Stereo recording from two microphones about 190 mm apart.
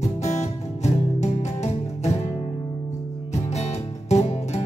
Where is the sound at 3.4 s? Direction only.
35° left (ahead or behind).